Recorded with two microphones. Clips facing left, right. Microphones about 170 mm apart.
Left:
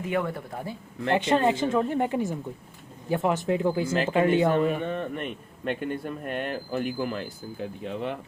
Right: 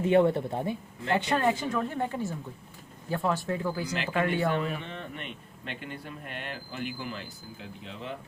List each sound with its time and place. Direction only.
0.0 s speech: 25° right (ahead or behind)
1.1 s speech: 20° left (ahead or behind)
4.5 s a man's voice: 45° left (ahead or behind)